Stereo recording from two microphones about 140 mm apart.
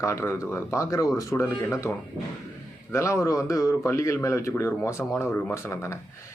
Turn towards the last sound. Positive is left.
turn(degrees=20)  # may be behind; listen again after turning